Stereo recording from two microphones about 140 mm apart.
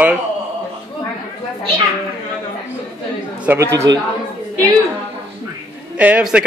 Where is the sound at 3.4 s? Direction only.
20° right (ahead or behind).